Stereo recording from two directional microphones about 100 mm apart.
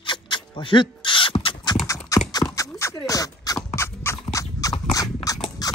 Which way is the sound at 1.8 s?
35° left (ahead or behind).